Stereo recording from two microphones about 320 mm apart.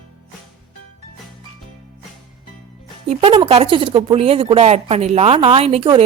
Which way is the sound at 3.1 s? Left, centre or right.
Centre.